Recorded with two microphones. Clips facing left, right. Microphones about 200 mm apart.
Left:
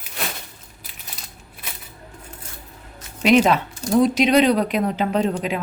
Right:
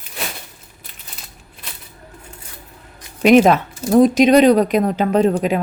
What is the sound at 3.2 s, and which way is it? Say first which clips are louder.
Speech: right 5 dB; 50° right (ahead or behind).